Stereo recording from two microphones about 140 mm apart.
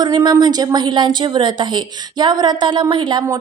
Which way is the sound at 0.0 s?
30° right (ahead or behind).